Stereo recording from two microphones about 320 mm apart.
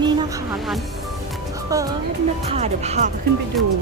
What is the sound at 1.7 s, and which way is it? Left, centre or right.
Speech, centre.